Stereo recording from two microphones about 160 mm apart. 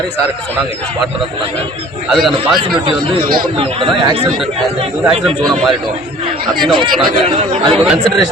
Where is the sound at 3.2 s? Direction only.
65° right (ahead or behind).